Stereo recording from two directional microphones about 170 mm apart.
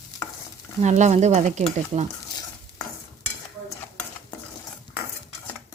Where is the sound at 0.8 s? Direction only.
45° right (ahead or behind).